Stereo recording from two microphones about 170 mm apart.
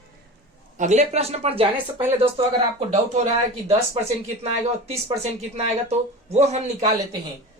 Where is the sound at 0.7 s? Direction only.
45° right (ahead or behind).